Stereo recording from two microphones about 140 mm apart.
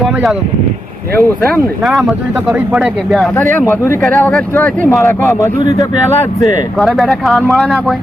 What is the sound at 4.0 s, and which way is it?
Speech, 5° left (ahead or behind).